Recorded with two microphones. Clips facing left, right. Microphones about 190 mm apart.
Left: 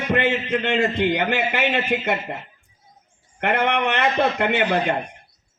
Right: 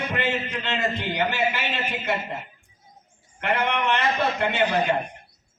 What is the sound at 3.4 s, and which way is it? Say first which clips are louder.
Speech: left 4 dB; 60° left (ahead or behind).